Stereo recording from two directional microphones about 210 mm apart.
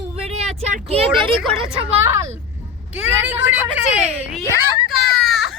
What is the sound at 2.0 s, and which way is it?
Speech, 15° right (ahead or behind).